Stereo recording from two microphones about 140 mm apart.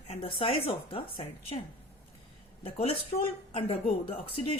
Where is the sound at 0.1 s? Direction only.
40° left (ahead or behind).